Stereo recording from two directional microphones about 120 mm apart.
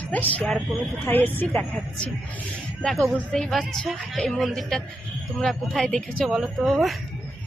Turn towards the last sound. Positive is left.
turn(degrees=0)  # may be behind; listen again after turning